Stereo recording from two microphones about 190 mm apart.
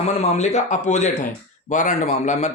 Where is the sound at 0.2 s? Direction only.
35° left (ahead or behind).